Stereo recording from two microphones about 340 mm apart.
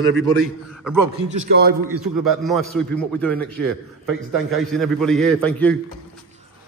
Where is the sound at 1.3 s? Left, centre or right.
Right.